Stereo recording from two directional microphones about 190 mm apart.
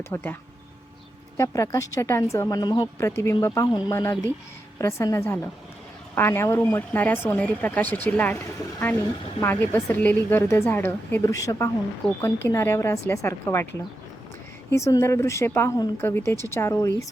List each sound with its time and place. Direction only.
0.0 s a woman's voice: 10° left (ahead or behind)
1.4 s a woman's voice: 15° left (ahead or behind)
9.4 s a woman's voice: 10° left (ahead or behind)
14.7 s a woman's voice: 15° left (ahead or behind)